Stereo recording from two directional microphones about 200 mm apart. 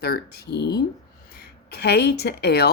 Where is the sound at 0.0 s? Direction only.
55° left (ahead or behind).